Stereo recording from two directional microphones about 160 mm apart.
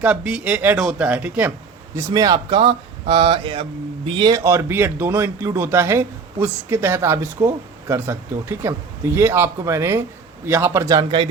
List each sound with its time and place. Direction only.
0.0 s speech: 10° right (ahead or behind)
2.0 s a man's voice: 20° right (ahead or behind)